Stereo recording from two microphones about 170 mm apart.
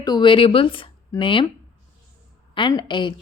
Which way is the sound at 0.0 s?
25° left (ahead or behind).